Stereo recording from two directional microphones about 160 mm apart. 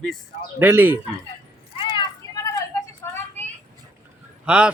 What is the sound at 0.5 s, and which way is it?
Speech, 10° right (ahead or behind).